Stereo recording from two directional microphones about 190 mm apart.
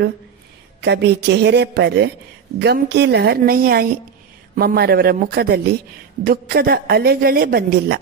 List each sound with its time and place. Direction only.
0.7 s a woman's voice: 60° right (ahead or behind)